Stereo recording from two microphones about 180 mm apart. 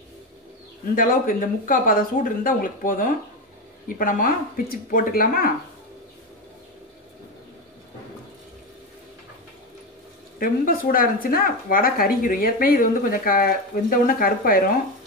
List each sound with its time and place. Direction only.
0.9 s speech: 50° left (ahead or behind)
10.4 s speech: 55° left (ahead or behind)